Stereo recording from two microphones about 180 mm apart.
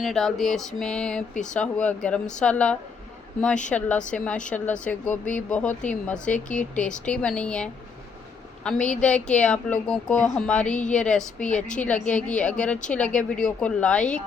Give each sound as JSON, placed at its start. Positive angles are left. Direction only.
{"t": 0.0, "sound": "a woman's voice", "side_deg": 0}